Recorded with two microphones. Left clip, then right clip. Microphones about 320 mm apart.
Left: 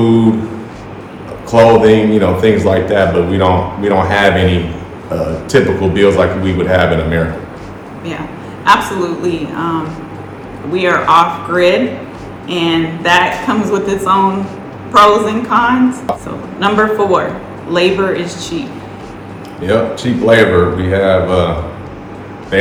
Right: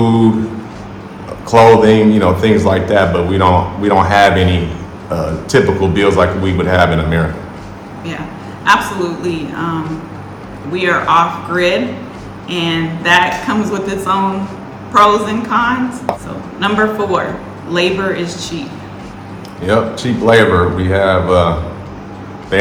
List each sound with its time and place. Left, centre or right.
1.5 s a man's voice: centre
8.6 s a man's voice: centre
19.6 s a man's voice: centre
22.5 s speech: centre